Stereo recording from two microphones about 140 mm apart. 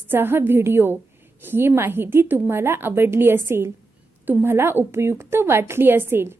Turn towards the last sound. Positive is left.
turn(degrees=-15)  # may be behind; listen again after turning